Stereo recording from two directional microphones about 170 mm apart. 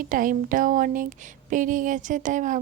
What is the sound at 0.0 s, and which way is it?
Speech, 50° right (ahead or behind).